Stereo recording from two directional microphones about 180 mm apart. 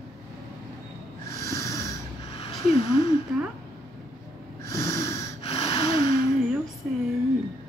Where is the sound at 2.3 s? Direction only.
35° left (ahead or behind).